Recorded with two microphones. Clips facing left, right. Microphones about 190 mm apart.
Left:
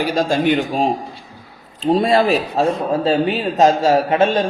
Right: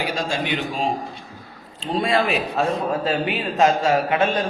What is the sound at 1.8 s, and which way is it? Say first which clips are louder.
A man's voice: left 6 dB; 40° left (ahead or behind).